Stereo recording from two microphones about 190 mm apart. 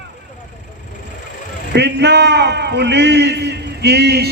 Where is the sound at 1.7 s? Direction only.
60° right (ahead or behind).